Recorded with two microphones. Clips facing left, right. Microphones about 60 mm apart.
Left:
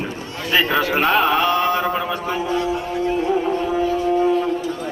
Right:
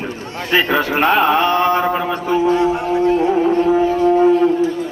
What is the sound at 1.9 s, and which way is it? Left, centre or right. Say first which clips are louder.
Speech: right 3 dB; centre.